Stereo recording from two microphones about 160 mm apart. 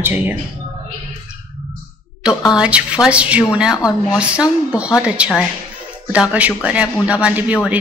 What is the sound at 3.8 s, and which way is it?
Speech, 20° left (ahead or behind).